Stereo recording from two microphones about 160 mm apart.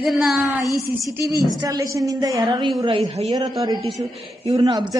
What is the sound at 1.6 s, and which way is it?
A woman's voice, 20° right (ahead or behind).